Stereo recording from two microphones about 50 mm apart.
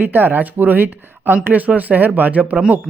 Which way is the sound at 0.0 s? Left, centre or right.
Right.